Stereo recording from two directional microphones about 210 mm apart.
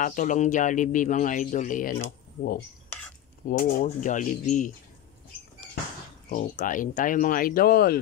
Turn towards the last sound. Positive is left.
turn(degrees=45)  # may be behind; listen again after turning